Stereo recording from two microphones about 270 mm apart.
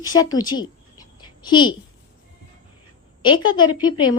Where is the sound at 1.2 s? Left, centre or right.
Centre.